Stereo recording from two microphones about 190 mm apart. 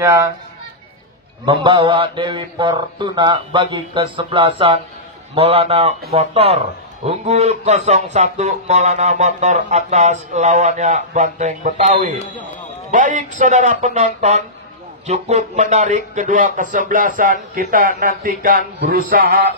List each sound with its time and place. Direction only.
0.0 s speech: 10° right (ahead or behind)
1.4 s a man's voice: 25° right (ahead or behind); by 19.4 s 50° right (ahead or behind)